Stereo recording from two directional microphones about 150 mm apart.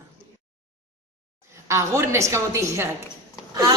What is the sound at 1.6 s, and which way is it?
Speech, 20° right (ahead or behind).